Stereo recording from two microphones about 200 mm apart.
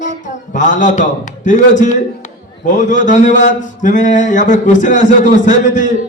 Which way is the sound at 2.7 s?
40° left (ahead or behind).